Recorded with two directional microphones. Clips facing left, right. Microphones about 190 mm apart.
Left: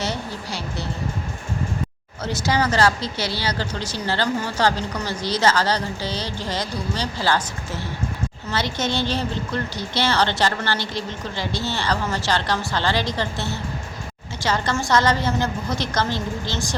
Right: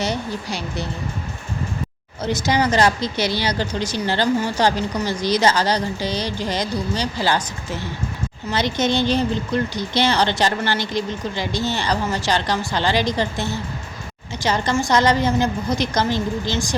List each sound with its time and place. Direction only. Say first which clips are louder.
0.0 s a woman's voice: right 3 dB; 15° right (ahead or behind)
2.2 s a woman's voice: right 2 dB; 20° right (ahead or behind)
8.4 s a woman's voice: right 5 dB; 15° right (ahead or behind)